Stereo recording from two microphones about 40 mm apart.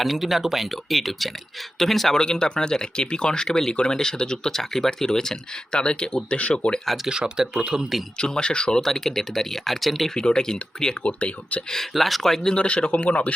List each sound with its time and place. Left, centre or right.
0.0 s speech: centre
2.1 s speech: centre
6.8 s speech: centre
7.1 s speech: centre
8.2 s speech: left
8.8 s speech: centre
10.2 s speech: centre
11.0 s a man's voice: left
11.7 s speech: centre
12.5 s a man's voice: left